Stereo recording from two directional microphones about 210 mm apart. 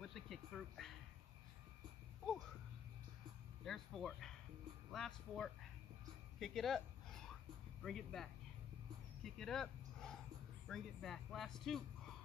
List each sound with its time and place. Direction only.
0.0 s music: centre (ahead or behind)
3.6 s speech: centre (ahead or behind)
6.4 s a sound: centre (ahead or behind)
7.8 s speech: centre (ahead or behind)